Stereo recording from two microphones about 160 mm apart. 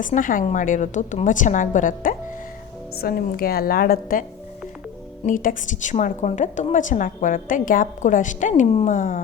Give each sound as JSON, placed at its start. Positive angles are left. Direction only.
{"t": 0.0, "sound": "a woman's voice", "side_deg": 55}
{"t": 3.0, "sound": "a woman's voice", "side_deg": 70}